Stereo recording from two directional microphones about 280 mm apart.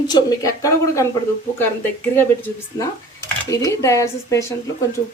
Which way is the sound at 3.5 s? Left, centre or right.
Centre.